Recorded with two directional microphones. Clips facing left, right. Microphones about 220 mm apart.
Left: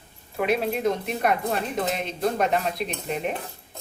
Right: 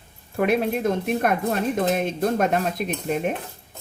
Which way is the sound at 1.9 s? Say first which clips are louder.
Right 4 dB; 50° right (ahead or behind).